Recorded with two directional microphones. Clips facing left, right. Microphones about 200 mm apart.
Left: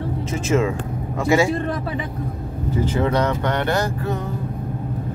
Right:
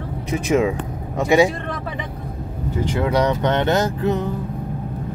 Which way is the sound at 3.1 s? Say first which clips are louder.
Right 2 dB; 15° right (ahead or behind).